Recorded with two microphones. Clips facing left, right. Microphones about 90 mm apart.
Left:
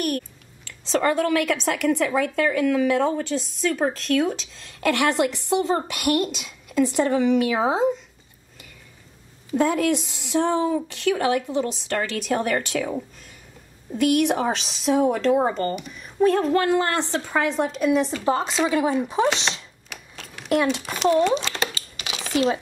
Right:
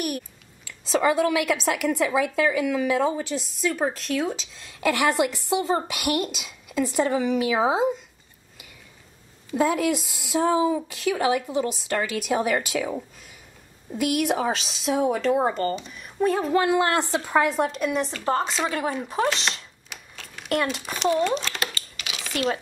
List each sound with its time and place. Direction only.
0.7 s a woman's voice: 5° right (ahead or behind)
9.5 s a woman's voice: centre (ahead or behind)
21.7 s computer keyboard: 25° left (ahead or behind)
22.3 s speech: 5° left (ahead or behind)